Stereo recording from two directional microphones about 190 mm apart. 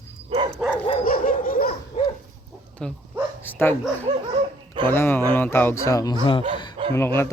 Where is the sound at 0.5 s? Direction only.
5° left (ahead or behind).